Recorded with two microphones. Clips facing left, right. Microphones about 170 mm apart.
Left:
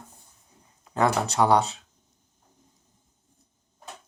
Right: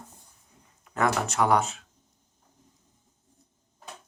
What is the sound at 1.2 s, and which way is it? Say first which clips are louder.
Speech: left 2 dB; 35° left (ahead or behind).